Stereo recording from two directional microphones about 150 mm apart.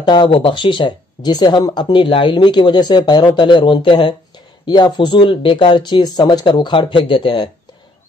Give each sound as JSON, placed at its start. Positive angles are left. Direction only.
{"t": 0.0, "sound": "speech", "side_deg": 30}